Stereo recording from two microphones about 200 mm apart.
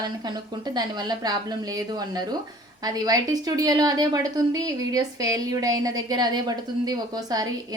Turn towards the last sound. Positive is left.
turn(degrees=-20)  # may be behind; listen again after turning